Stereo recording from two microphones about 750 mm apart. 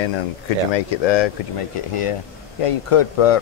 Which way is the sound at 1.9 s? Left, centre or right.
Left.